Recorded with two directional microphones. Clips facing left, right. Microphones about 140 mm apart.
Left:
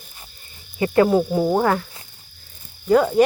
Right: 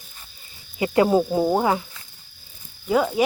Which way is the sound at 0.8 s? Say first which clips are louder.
Left 2 dB; 20° right (ahead or behind).